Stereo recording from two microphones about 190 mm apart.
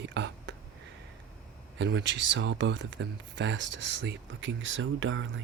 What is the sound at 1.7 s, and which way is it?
Speech, 70° right (ahead or behind).